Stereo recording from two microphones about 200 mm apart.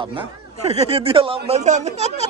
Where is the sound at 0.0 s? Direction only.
25° right (ahead or behind).